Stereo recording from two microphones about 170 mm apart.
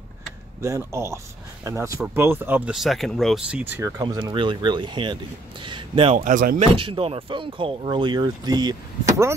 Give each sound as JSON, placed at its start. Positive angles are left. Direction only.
{"t": 0.6, "sound": "speech", "side_deg": -15}
{"t": 4.0, "sound": "speech", "side_deg": -25}
{"t": 6.1, "sound": "speech", "side_deg": -50}
{"t": 6.6, "sound": "speech", "side_deg": -30}